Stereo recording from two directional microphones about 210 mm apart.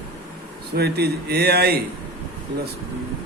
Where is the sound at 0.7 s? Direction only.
50° right (ahead or behind).